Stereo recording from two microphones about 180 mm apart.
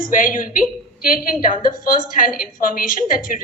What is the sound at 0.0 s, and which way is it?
A woman's voice, 50° left (ahead or behind).